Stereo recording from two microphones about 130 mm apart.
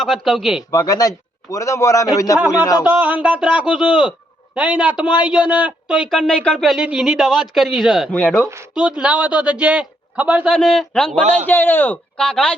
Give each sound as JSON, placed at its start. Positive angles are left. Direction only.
{"t": 0.0, "sound": "speech", "side_deg": 0}
{"t": 0.7, "sound": "a man's voice", "side_deg": 30}
{"t": 2.8, "sound": "a man's voice", "side_deg": -15}
{"t": 8.1, "sound": "a man's voice", "side_deg": 10}
{"t": 8.7, "sound": "a man's voice", "side_deg": -10}
{"t": 10.5, "sound": "speech", "side_deg": 5}
{"t": 11.2, "sound": "a man's voice", "side_deg": -60}
{"t": 11.4, "sound": "a man's voice", "side_deg": 15}